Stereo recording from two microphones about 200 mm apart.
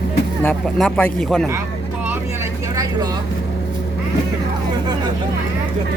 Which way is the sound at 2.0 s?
10° right (ahead or behind).